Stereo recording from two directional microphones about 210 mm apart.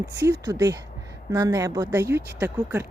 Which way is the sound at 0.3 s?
15° right (ahead or behind).